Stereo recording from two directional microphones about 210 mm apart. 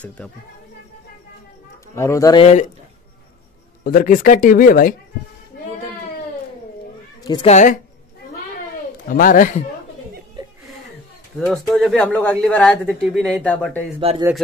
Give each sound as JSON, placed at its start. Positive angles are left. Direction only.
{"t": 2.0, "sound": "a man's voice", "side_deg": 15}
{"t": 3.8, "sound": "speech", "side_deg": 40}
{"t": 7.2, "sound": "speech", "side_deg": 20}
{"t": 7.5, "sound": "speech", "side_deg": 35}
{"t": 9.1, "sound": "speech", "side_deg": 40}
{"t": 10.4, "sound": "chuckle", "side_deg": -20}
{"t": 11.3, "sound": "speech", "side_deg": 0}
{"t": 13.9, "sound": "speech", "side_deg": -25}